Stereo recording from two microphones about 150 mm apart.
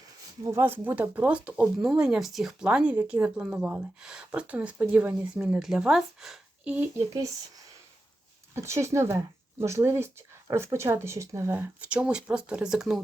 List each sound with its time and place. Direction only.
0.4 s speech: 15° right (ahead or behind)
7.1 s speech: 25° right (ahead or behind); by 13.0 s 5° right (ahead or behind)